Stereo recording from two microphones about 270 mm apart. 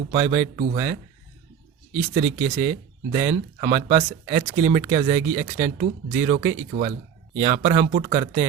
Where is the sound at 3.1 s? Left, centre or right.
Right.